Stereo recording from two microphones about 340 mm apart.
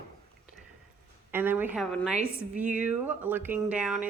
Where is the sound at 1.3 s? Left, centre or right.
Centre.